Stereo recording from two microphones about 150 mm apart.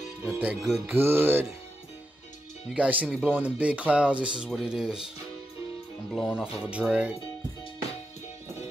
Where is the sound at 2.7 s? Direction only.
10° right (ahead or behind).